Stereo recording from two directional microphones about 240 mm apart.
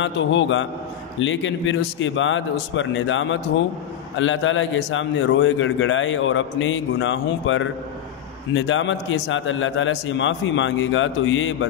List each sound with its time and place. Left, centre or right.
0.0 s a man's voice: left